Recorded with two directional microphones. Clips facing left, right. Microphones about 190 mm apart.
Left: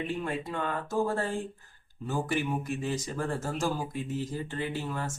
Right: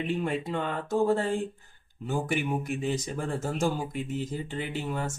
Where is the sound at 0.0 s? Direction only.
20° right (ahead or behind).